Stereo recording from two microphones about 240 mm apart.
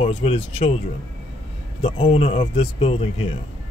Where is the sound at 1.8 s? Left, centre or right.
Left.